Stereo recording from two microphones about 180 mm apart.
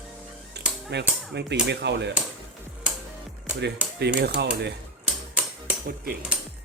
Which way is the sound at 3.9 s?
65° right (ahead or behind).